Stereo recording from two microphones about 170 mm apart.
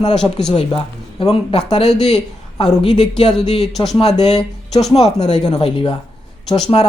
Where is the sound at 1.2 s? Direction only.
35° left (ahead or behind).